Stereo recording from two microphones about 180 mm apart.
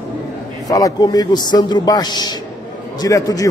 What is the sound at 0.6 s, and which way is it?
A man's voice, 20° left (ahead or behind).